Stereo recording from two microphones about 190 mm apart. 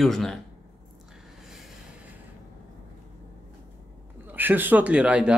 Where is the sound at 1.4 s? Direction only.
Centre (ahead or behind).